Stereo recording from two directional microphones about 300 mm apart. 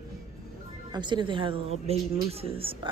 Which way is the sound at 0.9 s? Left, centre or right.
Centre.